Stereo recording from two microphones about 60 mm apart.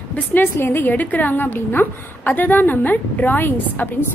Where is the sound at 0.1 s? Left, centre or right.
Left.